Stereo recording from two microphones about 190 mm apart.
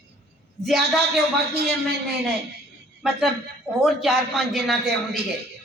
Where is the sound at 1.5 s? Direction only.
60° right (ahead or behind).